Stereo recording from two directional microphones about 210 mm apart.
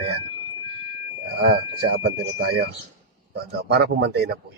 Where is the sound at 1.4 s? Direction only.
50° right (ahead or behind).